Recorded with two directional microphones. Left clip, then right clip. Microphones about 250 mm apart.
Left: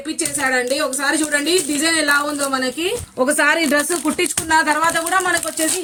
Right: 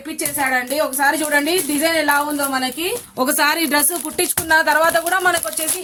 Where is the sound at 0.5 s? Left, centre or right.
Centre.